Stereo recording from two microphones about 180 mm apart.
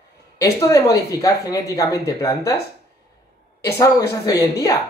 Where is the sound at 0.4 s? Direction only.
15° left (ahead or behind).